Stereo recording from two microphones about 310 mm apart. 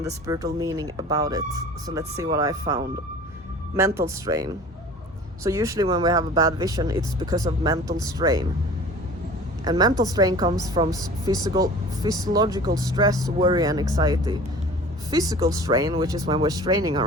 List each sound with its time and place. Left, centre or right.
0.0 s a woman's voice: centre
9.6 s a woman's voice: centre